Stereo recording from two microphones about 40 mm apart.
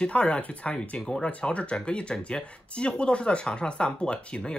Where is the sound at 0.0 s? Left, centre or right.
Left.